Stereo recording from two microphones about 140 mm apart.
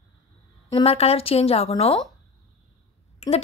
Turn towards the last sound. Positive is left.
turn(degrees=50)  # may be behind; listen again after turning